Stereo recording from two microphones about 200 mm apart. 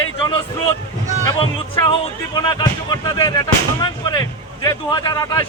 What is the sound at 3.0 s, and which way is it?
Speech, 15° left (ahead or behind).